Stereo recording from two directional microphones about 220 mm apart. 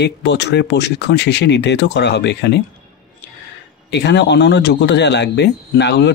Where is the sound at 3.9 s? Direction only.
50° left (ahead or behind).